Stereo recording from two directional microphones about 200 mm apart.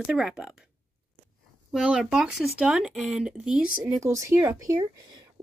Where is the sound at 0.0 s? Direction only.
5° right (ahead or behind).